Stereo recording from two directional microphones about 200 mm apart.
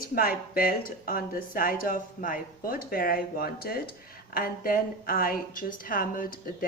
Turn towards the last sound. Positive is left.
turn(degrees=45)  # may be behind; listen again after turning